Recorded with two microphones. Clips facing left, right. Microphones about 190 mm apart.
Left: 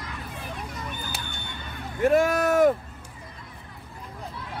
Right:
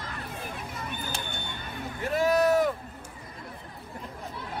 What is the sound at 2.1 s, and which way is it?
Vehicle, 50° left (ahead or behind).